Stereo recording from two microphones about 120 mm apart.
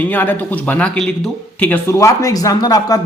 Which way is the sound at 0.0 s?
15° left (ahead or behind).